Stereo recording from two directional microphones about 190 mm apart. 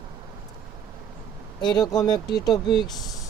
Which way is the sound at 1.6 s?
20° left (ahead or behind).